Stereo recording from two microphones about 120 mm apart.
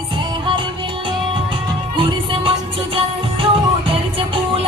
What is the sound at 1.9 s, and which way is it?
Music, 45° right (ahead or behind).